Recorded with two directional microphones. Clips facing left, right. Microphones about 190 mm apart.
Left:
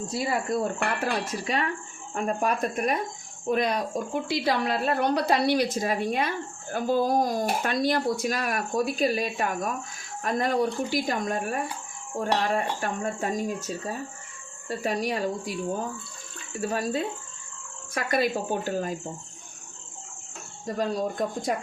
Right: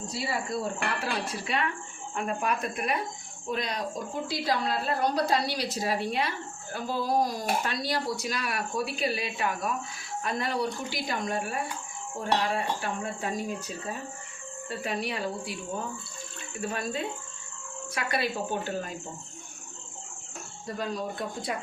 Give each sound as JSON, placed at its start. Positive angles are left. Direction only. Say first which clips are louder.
{"t": 0.1, "sound": "speech", "louder": "left 5 dB", "side_deg": 50}
{"t": 3.5, "sound": "speech", "louder": "left 6 dB", "side_deg": 55}
{"t": 16.6, "sound": "speech", "louder": "left 5 dB", "side_deg": 40}
{"t": 20.7, "sound": "speech", "louder": "left 6 dB", "side_deg": 40}